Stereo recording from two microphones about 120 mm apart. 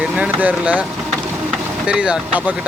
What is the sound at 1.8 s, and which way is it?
Speech, 10° right (ahead or behind).